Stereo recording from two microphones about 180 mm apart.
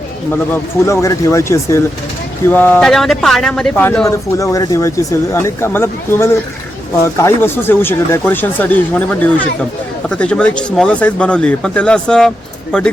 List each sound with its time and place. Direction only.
0.5 s speech: 15° left (ahead or behind)
4.4 s speech: 20° left (ahead or behind)